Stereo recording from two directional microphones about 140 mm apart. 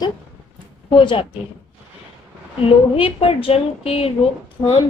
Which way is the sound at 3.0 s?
40° left (ahead or behind).